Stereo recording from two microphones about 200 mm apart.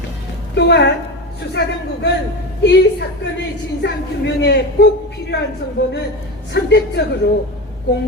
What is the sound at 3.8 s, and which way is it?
A woman's voice, 60° left (ahead or behind).